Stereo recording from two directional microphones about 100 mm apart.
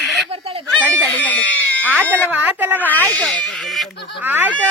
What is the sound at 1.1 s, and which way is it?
Speech, 15° left (ahead or behind).